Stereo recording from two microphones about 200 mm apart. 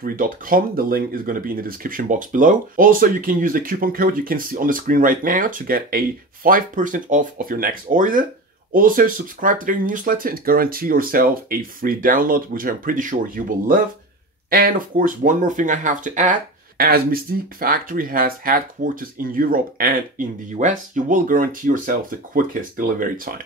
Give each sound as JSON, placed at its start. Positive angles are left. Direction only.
{"t": 0.0, "sound": "speech", "side_deg": -45}